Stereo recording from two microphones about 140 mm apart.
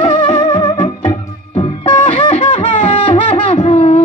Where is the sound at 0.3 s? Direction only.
35° left (ahead or behind).